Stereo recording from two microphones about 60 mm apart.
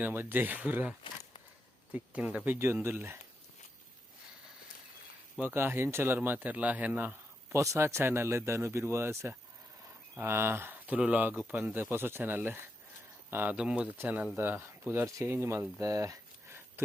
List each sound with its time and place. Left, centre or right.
0.1 s speech: right
1.9 s a man's voice: right
2.8 s speech: right
5.4 s speech: right
6.1 s a man's voice: right
7.5 s speech: right
10.8 s a man's voice: right
13.6 s speech: centre
14.3 s speech: right
15.4 s speech: right
15.8 s speech: right